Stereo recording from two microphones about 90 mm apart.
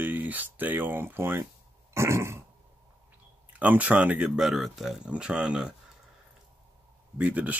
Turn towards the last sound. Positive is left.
turn(degrees=-15)  # may be behind; listen again after turning